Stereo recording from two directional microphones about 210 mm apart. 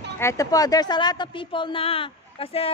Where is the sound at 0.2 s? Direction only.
15° left (ahead or behind).